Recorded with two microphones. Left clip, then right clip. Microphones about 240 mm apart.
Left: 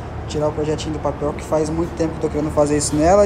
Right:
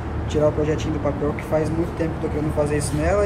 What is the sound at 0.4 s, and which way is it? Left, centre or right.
Speech, centre.